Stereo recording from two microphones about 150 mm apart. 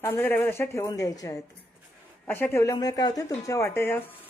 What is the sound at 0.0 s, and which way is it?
A woman's voice, 15° left (ahead or behind).